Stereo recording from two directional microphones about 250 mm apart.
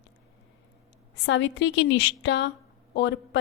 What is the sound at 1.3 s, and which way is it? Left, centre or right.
A woman's voice, left.